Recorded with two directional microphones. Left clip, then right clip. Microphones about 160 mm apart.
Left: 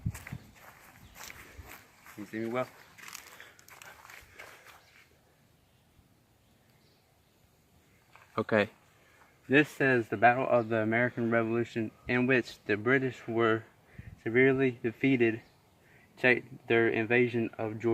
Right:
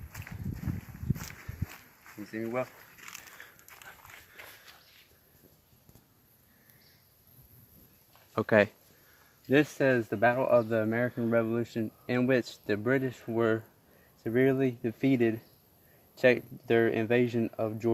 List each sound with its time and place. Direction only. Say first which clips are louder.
0.1 s a sound: right 3 dB; centre (ahead or behind)
1.1 s walk: right 1 dB; centre (ahead or behind)
2.3 s speech: even; 20° right (ahead or behind)
3.4 s dog: right 1 dB; centre (ahead or behind)
8.4 s speech: right 4 dB; 50° right (ahead or behind)
9.5 s speech: even; 70° right (ahead or behind); by 11.9 s 45° right (ahead or behind)
12.0 s speech: even; 60° right (ahead or behind)
16.2 s speech: right 2 dB; 75° right (ahead or behind)